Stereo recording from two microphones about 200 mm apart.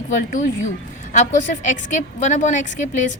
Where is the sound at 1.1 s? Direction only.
40° left (ahead or behind).